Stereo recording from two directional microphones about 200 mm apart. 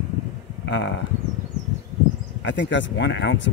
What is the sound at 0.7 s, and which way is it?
Speech, 60° left (ahead or behind).